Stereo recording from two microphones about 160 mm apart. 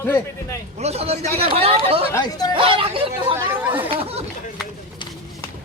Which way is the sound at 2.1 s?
25° left (ahead or behind).